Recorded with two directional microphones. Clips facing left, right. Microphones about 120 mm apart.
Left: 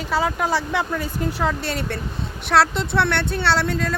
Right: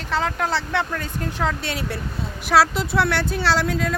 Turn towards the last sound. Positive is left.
turn(degrees=0)  # may be behind; listen again after turning